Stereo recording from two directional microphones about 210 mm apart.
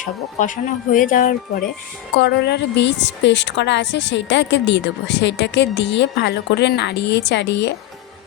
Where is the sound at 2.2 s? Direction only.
50° left (ahead or behind).